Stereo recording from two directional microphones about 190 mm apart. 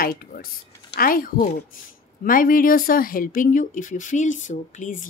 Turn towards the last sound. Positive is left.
turn(degrees=40)  # may be behind; listen again after turning